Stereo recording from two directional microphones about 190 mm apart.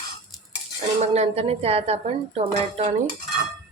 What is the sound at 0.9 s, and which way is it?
Speech, 35° right (ahead or behind).